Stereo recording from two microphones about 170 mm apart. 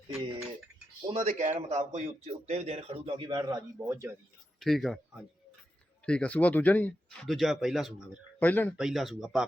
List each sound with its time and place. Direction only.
1.0 s speech: 40° right (ahead or behind); by 4.1 s 15° right (ahead or behind)
4.6 s speech: centre (ahead or behind)
8.4 s speech: 10° left (ahead or behind)
8.8 s speech: centre (ahead or behind)